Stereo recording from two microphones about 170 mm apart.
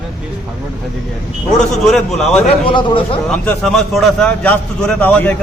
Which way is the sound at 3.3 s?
5° left (ahead or behind).